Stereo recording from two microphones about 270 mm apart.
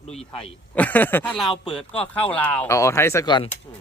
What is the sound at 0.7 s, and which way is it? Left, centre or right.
Speech, centre.